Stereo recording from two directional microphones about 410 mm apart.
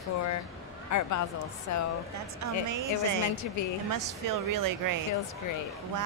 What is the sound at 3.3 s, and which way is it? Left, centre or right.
Speech, left.